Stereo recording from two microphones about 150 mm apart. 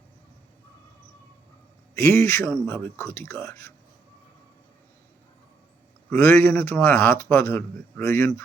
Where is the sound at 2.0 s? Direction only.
15° left (ahead or behind).